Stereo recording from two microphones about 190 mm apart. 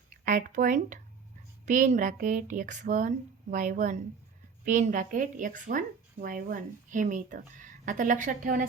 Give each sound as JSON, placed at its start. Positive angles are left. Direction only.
{"t": 0.3, "sound": "a woman's voice", "side_deg": -45}